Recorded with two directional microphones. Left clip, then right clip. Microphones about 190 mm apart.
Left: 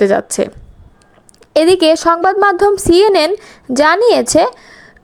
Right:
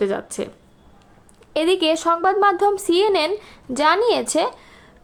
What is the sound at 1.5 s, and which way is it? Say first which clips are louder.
A woman's voice: left 9 dB; 35° left (ahead or behind).